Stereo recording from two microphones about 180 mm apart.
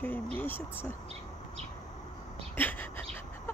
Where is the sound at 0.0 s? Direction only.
10° left (ahead or behind).